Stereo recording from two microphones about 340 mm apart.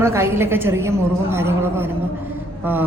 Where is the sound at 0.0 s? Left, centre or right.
Centre.